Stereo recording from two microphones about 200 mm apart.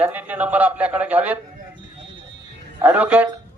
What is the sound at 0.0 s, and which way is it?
Speech, 10° right (ahead or behind).